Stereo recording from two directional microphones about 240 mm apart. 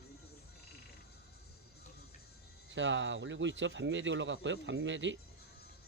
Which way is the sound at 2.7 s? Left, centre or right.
Right.